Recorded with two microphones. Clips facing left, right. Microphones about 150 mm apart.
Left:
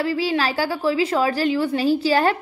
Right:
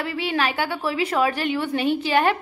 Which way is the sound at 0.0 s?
30° left (ahead or behind).